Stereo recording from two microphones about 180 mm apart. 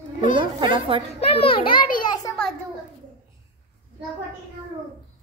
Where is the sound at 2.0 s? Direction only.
25° left (ahead or behind).